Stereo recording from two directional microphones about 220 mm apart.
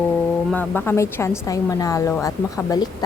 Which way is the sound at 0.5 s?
5° left (ahead or behind).